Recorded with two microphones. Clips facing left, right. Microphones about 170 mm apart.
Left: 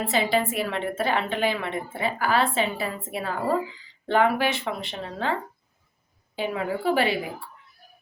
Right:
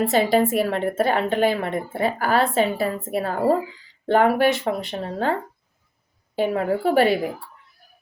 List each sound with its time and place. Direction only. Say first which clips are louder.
0.0 s a woman's voice: right 6 dB; 45° right (ahead or behind)
6.3 s a woman's voice: right 6 dB; 45° right (ahead or behind)